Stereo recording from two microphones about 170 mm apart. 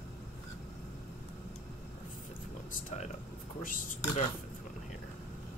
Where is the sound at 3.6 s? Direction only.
55° left (ahead or behind).